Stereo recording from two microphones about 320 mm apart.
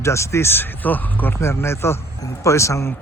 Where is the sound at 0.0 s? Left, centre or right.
Centre.